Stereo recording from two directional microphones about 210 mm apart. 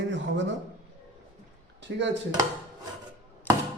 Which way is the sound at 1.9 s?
55° right (ahead or behind).